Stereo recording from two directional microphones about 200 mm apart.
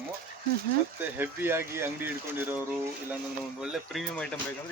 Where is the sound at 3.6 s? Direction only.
Centre (ahead or behind).